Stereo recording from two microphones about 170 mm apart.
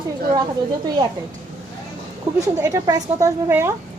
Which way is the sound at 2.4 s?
20° right (ahead or behind).